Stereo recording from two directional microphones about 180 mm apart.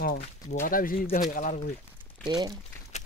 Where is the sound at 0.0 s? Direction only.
55° left (ahead or behind).